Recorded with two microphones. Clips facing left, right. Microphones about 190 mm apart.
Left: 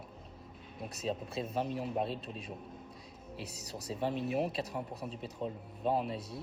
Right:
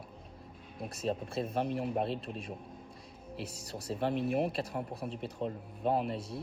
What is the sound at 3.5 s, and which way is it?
Speech, 70° left (ahead or behind).